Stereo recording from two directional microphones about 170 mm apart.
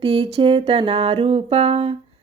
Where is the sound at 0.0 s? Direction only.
35° right (ahead or behind).